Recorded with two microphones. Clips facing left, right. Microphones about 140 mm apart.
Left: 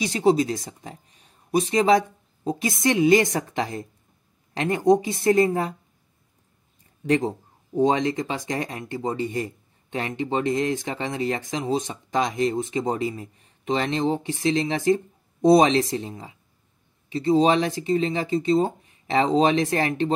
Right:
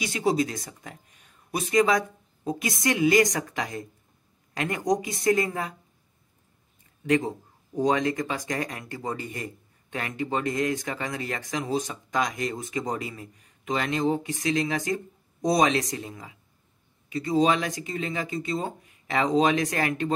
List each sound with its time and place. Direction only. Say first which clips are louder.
0.1 s speech: left 5 dB; 25° left (ahead or behind)
7.1 s speech: left 2 dB; 35° left (ahead or behind)